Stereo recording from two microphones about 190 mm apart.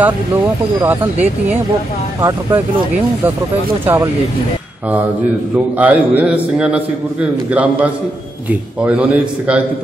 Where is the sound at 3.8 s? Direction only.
10° right (ahead or behind).